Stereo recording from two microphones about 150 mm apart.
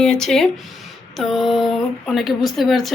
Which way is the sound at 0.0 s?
5° left (ahead or behind).